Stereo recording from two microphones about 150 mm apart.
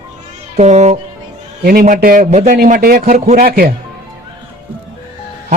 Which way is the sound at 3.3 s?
75° right (ahead or behind).